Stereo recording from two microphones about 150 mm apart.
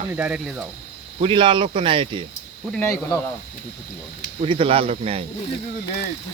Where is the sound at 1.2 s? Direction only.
35° right (ahead or behind).